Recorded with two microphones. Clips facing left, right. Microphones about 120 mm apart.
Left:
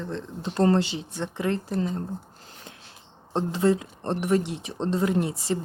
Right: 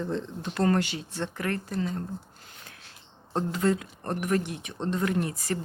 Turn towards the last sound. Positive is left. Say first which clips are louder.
# left 3 dB
turn(degrees=25)  # may be behind; listen again after turning